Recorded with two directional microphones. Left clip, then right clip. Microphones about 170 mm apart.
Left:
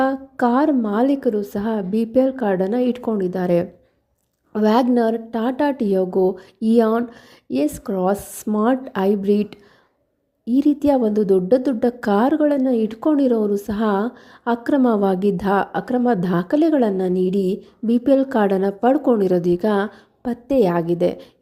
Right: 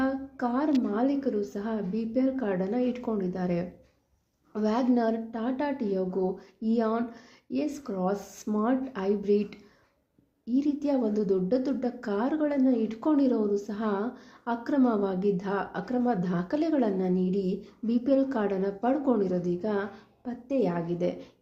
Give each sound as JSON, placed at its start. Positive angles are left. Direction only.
{"t": 0.0, "sound": "a woman's voice", "side_deg": 55}
{"t": 19.3, "sound": "a woman's voice", "side_deg": 60}